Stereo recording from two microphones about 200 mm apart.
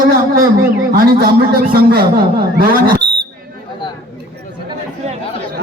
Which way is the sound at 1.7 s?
50° right (ahead or behind).